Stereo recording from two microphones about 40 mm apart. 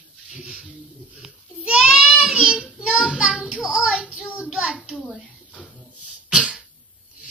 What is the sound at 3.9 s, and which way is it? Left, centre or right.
Child singing, right.